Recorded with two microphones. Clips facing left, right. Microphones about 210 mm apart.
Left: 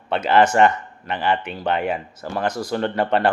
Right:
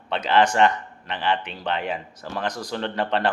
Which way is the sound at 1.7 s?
50° left (ahead or behind).